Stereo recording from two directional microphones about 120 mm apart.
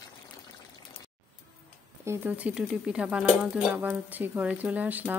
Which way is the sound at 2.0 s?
15° right (ahead or behind).